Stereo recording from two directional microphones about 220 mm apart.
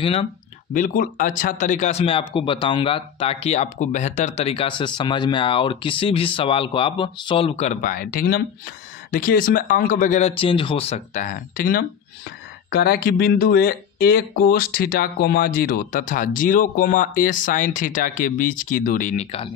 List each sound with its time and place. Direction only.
0.0 s speech: 25° left (ahead or behind)
0.7 s speech: 40° left (ahead or behind)